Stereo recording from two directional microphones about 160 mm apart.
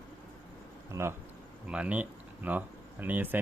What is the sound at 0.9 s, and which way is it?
Speech, 15° right (ahead or behind).